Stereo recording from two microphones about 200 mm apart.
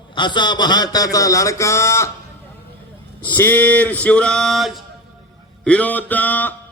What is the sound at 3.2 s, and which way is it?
Music, 10° left (ahead or behind).